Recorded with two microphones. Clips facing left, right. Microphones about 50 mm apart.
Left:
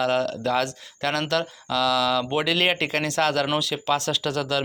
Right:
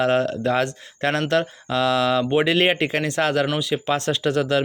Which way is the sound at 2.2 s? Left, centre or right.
Centre.